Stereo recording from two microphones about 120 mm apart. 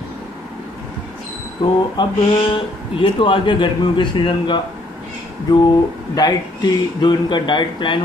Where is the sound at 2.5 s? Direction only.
45° left (ahead or behind).